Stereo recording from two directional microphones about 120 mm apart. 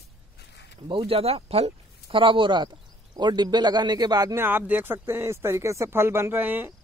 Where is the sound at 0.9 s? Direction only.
50° right (ahead or behind).